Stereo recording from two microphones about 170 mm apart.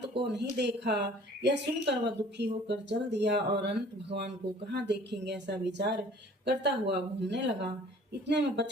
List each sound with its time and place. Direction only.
0.3 s speech: 80° right